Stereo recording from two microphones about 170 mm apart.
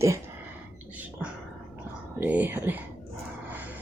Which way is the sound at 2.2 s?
10° right (ahead or behind).